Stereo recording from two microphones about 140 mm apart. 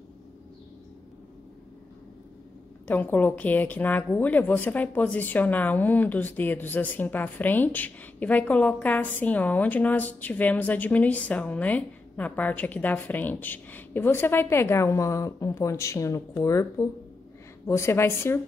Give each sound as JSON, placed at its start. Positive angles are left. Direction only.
{"t": 2.9, "sound": "speech", "side_deg": 15}